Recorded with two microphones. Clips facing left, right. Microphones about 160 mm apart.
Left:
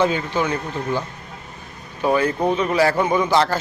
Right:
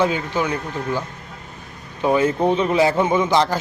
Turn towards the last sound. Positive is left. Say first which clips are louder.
# even
turn(degrees=-15)  # may be behind; listen again after turning